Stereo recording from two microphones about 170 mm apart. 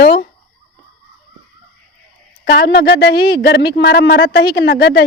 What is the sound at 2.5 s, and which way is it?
Speech, 75° left (ahead or behind).